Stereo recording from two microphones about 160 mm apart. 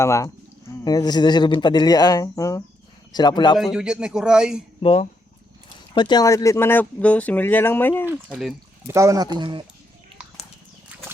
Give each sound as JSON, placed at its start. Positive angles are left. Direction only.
{"t": 0.0, "sound": "speech", "side_deg": 20}
{"t": 3.6, "sound": "a man's voice", "side_deg": -5}
{"t": 4.8, "sound": "speech", "side_deg": 35}
{"t": 8.0, "sound": "speech", "side_deg": -10}
{"t": 8.9, "sound": "speech", "side_deg": -20}